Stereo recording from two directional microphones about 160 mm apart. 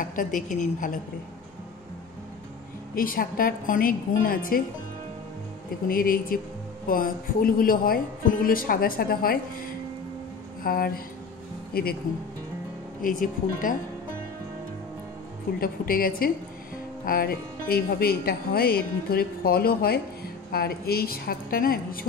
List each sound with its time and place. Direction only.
0.0 s speech: 55° left (ahead or behind)
2.9 s speech: 65° left (ahead or behind)
5.9 s speech: 60° left (ahead or behind)
13.0 s speech: 55° left (ahead or behind)
15.6 s speech: 65° left (ahead or behind)